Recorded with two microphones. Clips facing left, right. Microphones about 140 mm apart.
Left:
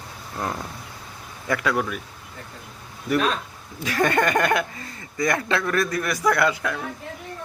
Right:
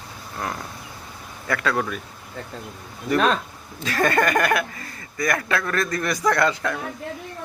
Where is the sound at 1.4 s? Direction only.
15° left (ahead or behind).